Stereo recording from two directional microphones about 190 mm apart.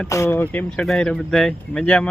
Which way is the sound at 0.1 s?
15° left (ahead or behind).